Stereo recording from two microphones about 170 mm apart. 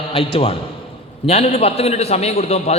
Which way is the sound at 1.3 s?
35° left (ahead or behind).